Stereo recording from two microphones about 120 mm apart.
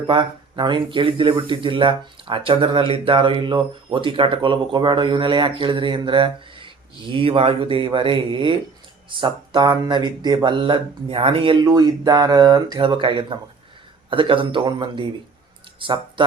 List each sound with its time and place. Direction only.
0.1 s speech: 40° right (ahead or behind)
11.6 s speech: 30° right (ahead or behind)